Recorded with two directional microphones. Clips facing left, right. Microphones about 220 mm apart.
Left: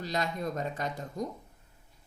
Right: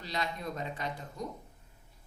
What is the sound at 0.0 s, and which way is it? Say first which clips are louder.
A woman's voice: left 4 dB; 45° left (ahead or behind).